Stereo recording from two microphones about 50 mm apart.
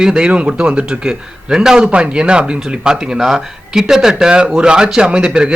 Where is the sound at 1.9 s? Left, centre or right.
Right.